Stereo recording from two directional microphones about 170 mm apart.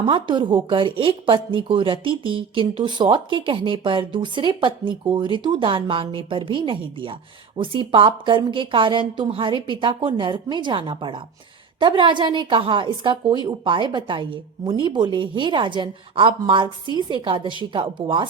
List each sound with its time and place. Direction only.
0.0 s a woman's voice: 25° right (ahead or behind)